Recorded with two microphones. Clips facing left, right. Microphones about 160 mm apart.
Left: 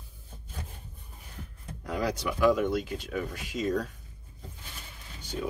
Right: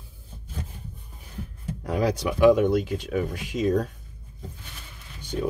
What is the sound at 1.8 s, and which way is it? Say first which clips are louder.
Speech: right 6 dB; 50° right (ahead or behind).